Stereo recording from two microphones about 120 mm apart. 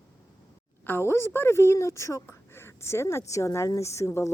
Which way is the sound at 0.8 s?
20° left (ahead or behind).